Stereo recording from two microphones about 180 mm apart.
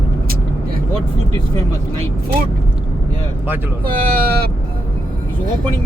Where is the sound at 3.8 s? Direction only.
55° right (ahead or behind).